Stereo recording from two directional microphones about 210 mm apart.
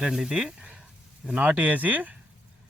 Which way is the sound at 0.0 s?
Centre (ahead or behind).